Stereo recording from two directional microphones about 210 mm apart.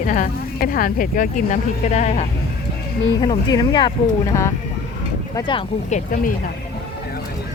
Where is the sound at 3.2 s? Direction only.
20° left (ahead or behind).